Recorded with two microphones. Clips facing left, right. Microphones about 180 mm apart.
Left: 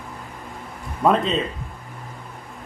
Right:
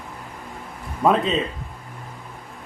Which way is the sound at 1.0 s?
Centre (ahead or behind).